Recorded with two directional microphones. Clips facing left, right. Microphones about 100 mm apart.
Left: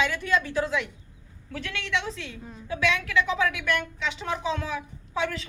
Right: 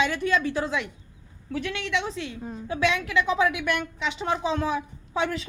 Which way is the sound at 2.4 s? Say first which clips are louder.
Left 1 dB; 35° right (ahead or behind).